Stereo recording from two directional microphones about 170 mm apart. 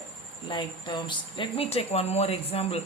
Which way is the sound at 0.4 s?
30° left (ahead or behind).